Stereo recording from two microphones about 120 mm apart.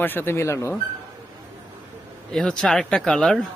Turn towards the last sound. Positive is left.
turn(degrees=5)  # may be behind; listen again after turning